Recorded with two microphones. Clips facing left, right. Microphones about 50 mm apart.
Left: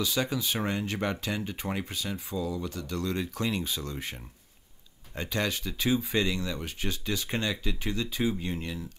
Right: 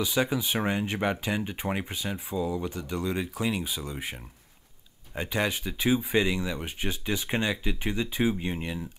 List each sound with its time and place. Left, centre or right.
0.0 s speech: centre